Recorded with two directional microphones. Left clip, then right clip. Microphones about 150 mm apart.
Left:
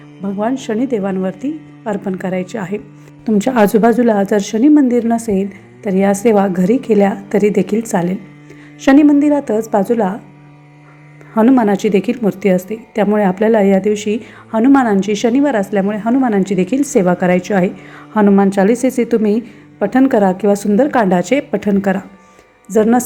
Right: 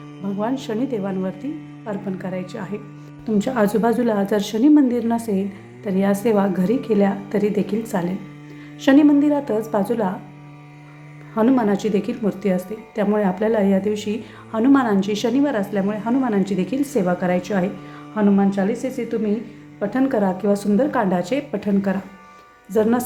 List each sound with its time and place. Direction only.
0.3 s a woman's voice: 30° left (ahead or behind)
11.3 s a woman's voice: 35° left (ahead or behind)
18.1 s a woman's voice: 55° left (ahead or behind)
19.8 s a woman's voice: 45° left (ahead or behind)